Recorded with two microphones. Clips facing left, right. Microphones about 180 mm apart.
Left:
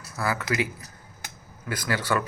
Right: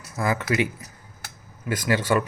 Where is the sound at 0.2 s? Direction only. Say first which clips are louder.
Right 3 dB; 20° right (ahead or behind).